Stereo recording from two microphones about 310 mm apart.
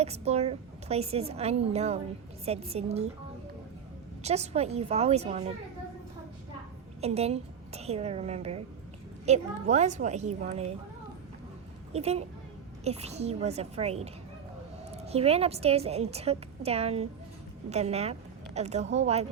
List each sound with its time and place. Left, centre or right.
0.0 s a woman's voice: right
4.2 s a woman's voice: right
7.0 s a woman's voice: right
11.9 s a woman's voice: centre